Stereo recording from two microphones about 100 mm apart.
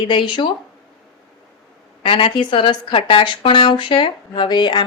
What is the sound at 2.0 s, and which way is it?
A woman's voice, 60° left (ahead or behind).